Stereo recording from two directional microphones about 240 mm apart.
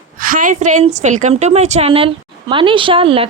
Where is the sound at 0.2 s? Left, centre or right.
Right.